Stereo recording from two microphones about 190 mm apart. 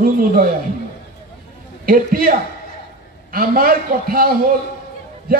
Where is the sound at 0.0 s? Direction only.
50° right (ahead or behind).